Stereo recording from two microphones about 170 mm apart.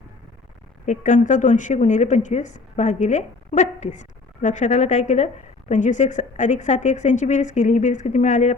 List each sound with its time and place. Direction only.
0.9 s speech: 45° left (ahead or behind)